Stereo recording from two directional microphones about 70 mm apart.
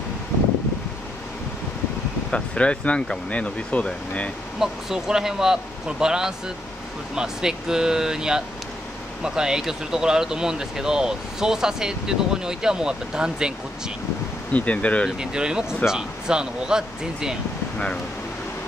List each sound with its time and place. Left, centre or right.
2.3 s speech: centre
4.6 s speech: centre
14.5 s speech: centre
15.0 s speech: centre